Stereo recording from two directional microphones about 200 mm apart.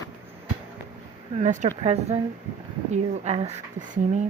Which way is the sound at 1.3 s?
35° right (ahead or behind).